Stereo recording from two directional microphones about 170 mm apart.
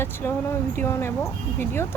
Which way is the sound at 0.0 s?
15° left (ahead or behind).